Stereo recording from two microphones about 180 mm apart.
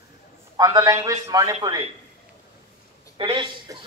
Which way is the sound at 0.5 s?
20° right (ahead or behind).